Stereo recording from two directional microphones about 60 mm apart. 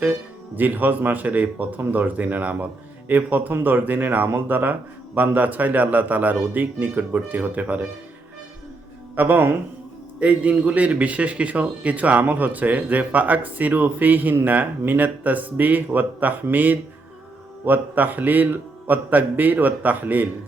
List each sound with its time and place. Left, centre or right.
0.0 s speech: right
9.1 s speech: right
10.2 s speech: right